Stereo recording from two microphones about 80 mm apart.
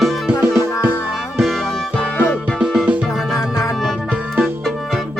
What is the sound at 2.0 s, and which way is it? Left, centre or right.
Music, centre.